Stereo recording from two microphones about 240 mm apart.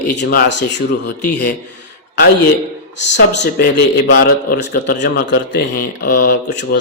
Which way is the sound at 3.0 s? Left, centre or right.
Left.